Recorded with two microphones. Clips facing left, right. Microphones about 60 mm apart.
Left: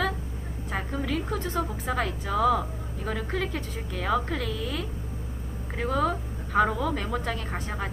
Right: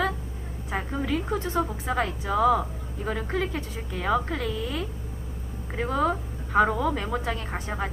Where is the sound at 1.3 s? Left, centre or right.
Right; by 7.3 s centre.